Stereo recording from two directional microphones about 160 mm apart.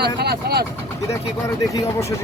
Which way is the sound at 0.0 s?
85° right.